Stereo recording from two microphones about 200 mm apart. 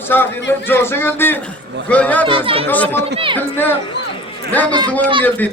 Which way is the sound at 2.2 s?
25° right (ahead or behind).